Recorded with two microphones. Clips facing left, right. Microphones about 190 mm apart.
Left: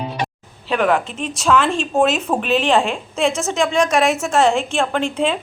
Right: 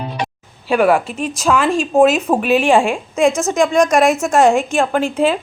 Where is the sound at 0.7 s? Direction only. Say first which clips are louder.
Right 4 dB; 10° right (ahead or behind).